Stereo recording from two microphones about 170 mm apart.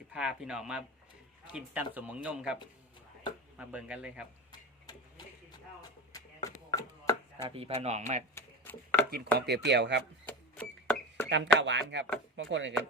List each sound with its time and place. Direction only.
0.1 s speech: 5° right (ahead or behind)
3.6 s speech: 5° right (ahead or behind)
4.5 s tick-tock: 25° left (ahead or behind)
6.1 s chopping: 20° left (ahead or behind)
7.4 s speech: 35° right (ahead or behind)
8.4 s a sound: 15° left (ahead or behind)
9.5 s speech: 85° right
10.2 s a sound: 10° left (ahead or behind)
11.3 s speech: 90° right